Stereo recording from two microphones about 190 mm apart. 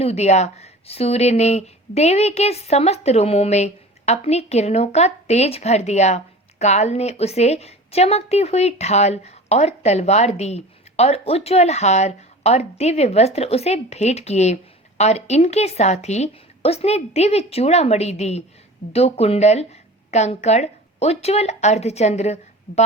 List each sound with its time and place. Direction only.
0.0 s speech: 35° left (ahead or behind)